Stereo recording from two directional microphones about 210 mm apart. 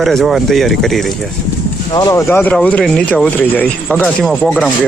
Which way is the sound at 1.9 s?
20° left (ahead or behind).